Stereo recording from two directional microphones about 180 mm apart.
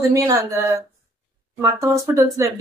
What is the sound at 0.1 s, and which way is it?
Speech, 20° right (ahead or behind).